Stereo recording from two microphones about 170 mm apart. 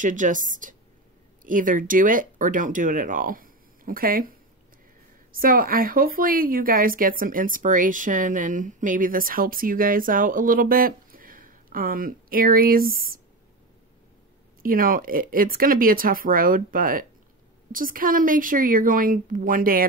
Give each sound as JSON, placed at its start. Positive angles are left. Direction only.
{"t": 0.0, "sound": "a woman's voice", "side_deg": -50}
{"t": 14.6, "sound": "a woman's voice", "side_deg": -55}